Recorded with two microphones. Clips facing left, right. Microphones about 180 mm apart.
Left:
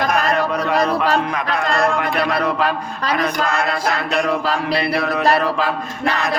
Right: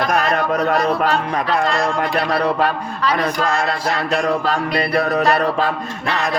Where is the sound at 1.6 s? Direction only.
55° left (ahead or behind).